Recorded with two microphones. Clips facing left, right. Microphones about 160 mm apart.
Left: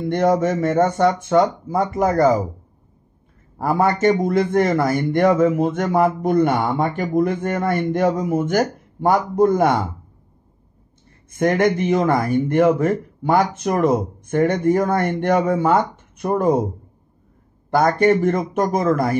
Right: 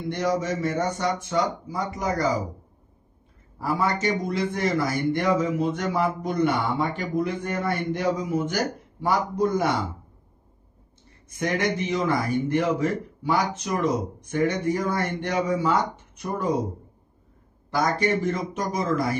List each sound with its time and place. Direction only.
0.1 s a man's voice: 55° left (ahead or behind)
3.5 s a man's voice: 50° left (ahead or behind)
11.2 s a man's voice: 55° left (ahead or behind)
17.6 s a man's voice: 55° left (ahead or behind)